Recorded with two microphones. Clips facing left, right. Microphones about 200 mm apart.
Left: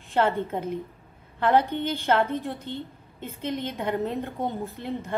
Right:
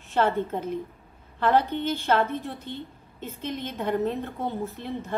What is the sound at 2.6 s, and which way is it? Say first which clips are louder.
Speech: left 2 dB; 55° left (ahead or behind).